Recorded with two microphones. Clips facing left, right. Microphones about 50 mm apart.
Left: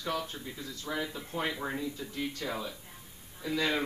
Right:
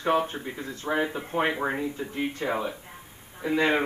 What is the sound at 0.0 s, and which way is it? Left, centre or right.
Speech, right.